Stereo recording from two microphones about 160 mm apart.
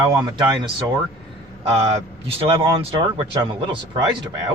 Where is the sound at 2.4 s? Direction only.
35° right (ahead or behind).